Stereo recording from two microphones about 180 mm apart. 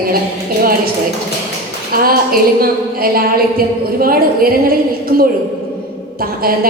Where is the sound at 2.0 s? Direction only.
55° right (ahead or behind).